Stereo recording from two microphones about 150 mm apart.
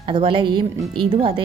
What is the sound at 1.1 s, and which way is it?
Speech, 35° right (ahead or behind).